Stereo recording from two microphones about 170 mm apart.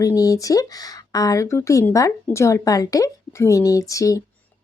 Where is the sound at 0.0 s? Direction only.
20° left (ahead or behind).